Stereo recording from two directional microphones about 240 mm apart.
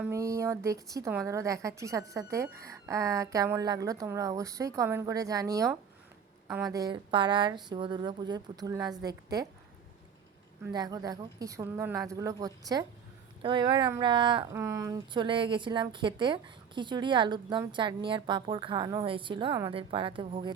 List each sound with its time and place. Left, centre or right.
0.0 s a woman's voice: centre
10.7 s a woman's voice: centre